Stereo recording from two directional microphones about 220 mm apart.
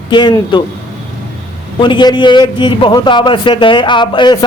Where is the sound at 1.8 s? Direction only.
20° left (ahead or behind).